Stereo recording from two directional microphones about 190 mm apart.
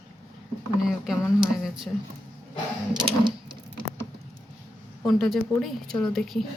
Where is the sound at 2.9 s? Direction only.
25° right (ahead or behind).